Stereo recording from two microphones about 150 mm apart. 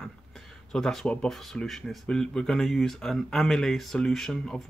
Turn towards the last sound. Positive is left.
turn(degrees=5)  # may be behind; listen again after turning